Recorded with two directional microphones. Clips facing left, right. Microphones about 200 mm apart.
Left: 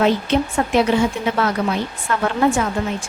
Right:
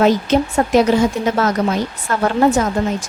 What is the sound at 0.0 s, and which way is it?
A woman's voice, 40° right (ahead or behind).